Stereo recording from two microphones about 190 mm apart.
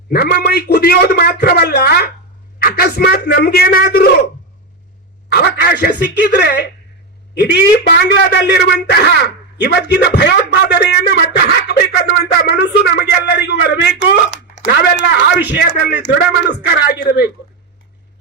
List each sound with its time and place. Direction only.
0.1 s speech: 55° left (ahead or behind)
5.3 s a woman's voice: 60° left (ahead or behind)